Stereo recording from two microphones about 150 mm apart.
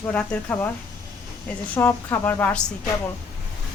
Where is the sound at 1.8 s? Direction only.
15° left (ahead or behind).